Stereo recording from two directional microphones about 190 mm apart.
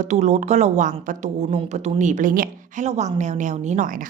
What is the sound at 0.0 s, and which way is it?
Speech, 40° right (ahead or behind).